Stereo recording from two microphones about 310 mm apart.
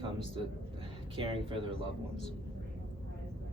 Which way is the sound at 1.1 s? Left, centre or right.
Centre.